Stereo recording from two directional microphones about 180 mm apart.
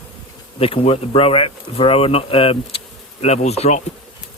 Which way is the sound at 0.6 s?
30° left (ahead or behind).